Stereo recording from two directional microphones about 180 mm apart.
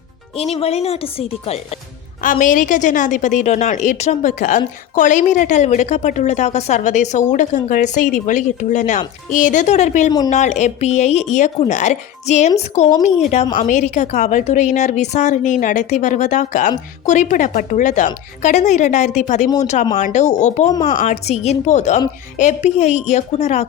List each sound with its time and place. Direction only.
0.5 s a woman's voice: 35° left (ahead or behind)
2.2 s a woman's voice: 45° left (ahead or behind)